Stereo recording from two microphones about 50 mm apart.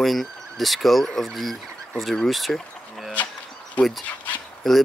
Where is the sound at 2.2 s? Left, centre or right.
Centre.